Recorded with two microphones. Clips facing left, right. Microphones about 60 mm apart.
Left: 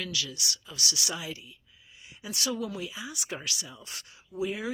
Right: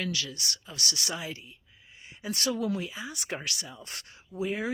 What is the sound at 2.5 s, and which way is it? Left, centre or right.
Speech, right.